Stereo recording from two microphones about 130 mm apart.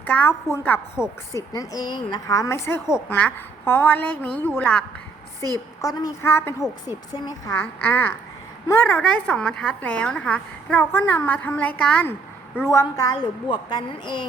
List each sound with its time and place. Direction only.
0.0 s a woman's voice: 10° left (ahead or behind)
1.5 s a woman's voice: 30° left (ahead or behind); by 4.9 s 10° left (ahead or behind)
5.8 s a woman's voice: 30° left (ahead or behind)
6.2 s a woman's voice: 15° left (ahead or behind)
7.1 s a woman's voice: 30° left (ahead or behind)
7.5 s a woman's voice: 15° left (ahead or behind)
12.6 s a woman's voice: 25° left (ahead or behind)